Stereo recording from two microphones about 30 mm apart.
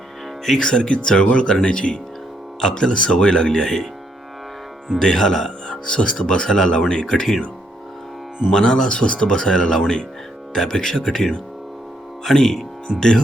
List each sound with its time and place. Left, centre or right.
0.6 s speech: left
3.6 s speech: centre
4.9 s speech: centre
5.6 s speech: left
8.5 s speech: left
8.9 s speech: left; by 12.5 s centre
13.0 s speech: left